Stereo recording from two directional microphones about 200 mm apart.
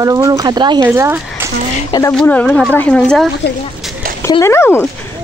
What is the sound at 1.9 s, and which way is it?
Speech, 15° left (ahead or behind).